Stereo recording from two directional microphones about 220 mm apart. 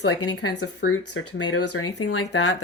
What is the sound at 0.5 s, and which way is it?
Speech, 60° left (ahead or behind).